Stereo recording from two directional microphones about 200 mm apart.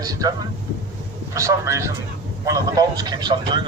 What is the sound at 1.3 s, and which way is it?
Speech, 15° right (ahead or behind).